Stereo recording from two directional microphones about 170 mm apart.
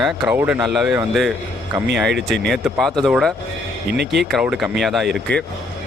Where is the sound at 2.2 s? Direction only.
Centre (ahead or behind).